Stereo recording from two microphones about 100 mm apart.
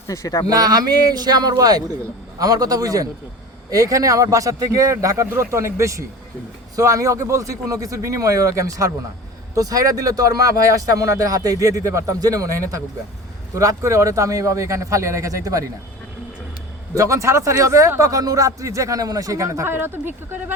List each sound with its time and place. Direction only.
0.1 s speech: 35° left (ahead or behind)
0.4 s a man's voice: 40° right (ahead or behind)
16.9 s a man's voice: 30° right (ahead or behind)